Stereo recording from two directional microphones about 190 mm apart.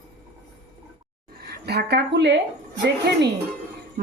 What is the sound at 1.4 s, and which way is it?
A woman's voice, 55° right (ahead or behind).